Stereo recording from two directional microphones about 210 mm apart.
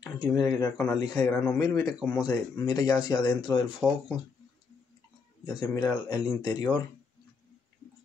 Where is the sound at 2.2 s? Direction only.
20° left (ahead or behind).